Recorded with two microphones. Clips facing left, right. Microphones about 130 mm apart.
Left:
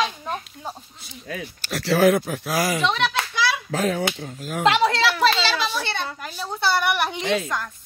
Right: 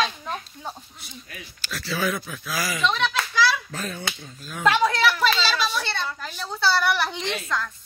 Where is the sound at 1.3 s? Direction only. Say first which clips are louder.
Left 7 dB; 70° left (ahead or behind).